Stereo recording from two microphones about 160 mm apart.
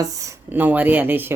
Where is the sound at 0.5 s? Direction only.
10° right (ahead or behind).